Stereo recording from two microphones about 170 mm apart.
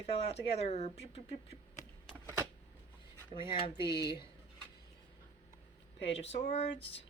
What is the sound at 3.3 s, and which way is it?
Speech, 30° left (ahead or behind).